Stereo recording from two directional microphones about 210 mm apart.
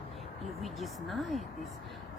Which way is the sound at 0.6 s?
Centre (ahead or behind).